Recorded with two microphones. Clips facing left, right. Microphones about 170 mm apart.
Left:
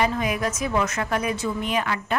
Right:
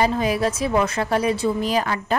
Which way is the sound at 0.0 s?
30° right (ahead or behind).